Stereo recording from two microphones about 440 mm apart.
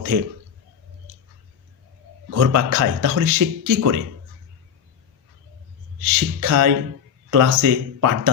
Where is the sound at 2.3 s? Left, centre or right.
Right.